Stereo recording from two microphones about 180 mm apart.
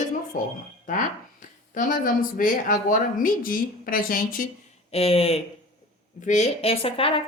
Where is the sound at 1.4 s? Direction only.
45° left (ahead or behind).